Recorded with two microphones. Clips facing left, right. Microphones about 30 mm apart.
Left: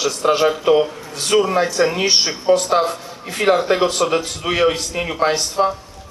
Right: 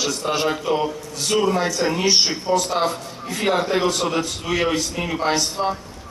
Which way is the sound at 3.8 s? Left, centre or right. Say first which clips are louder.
Left 3 dB; left.